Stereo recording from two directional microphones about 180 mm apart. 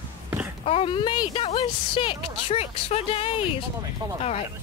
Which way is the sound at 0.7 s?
30° left (ahead or behind).